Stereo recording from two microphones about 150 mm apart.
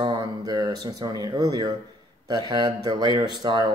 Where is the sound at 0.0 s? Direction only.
30° right (ahead or behind).